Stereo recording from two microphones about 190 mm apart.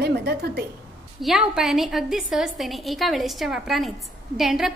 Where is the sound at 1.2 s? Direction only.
Centre (ahead or behind).